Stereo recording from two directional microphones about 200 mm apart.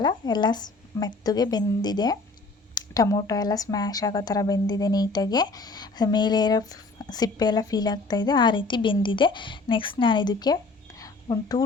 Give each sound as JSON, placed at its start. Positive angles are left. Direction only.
{"t": 0.0, "sound": "speech", "side_deg": 20}